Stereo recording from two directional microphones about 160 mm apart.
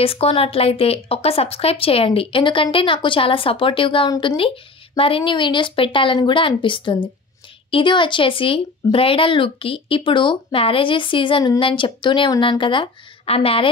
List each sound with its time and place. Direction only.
0.0 s speech: 35° left (ahead or behind)